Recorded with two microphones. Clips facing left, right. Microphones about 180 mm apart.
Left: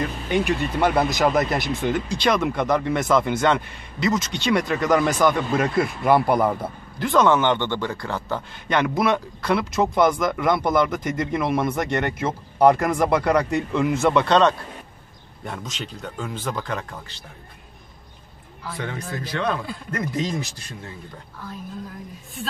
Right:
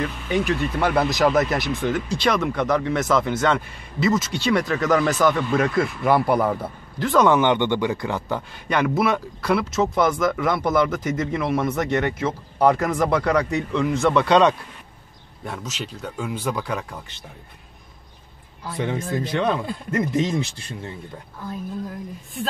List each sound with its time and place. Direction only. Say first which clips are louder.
0.3 s speech: even; centre (ahead or behind)
7.2 s speech: right 1 dB; 10° right (ahead or behind)
8.4 s speech: left 3 dB; 5° right (ahead or behind)
14.2 s speech: right 1 dB; 10° right (ahead or behind)
18.7 s speech: right 5 dB; 20° right (ahead or behind)